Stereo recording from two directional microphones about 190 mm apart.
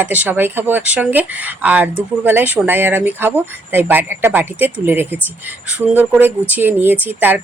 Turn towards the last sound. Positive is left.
turn(degrees=-10)  # may be behind; listen again after turning